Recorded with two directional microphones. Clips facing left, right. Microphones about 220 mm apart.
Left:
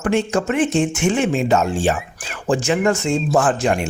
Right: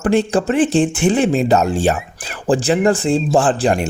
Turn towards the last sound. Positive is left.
turn(degrees=-35)  # may be behind; listen again after turning